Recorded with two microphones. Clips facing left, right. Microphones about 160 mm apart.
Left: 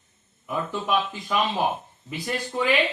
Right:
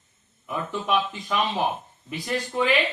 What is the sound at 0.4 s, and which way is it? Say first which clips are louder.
A man's voice: even; centre (ahead or behind).